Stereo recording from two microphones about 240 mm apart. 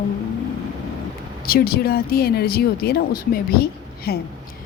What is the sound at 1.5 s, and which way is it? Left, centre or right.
Speech, left.